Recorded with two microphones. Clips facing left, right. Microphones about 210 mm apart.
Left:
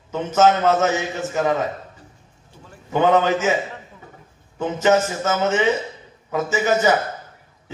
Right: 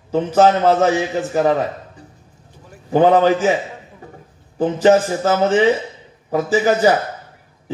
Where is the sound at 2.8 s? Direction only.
35° right (ahead or behind).